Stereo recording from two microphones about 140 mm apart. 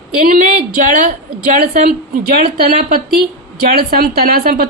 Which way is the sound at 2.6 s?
90° right.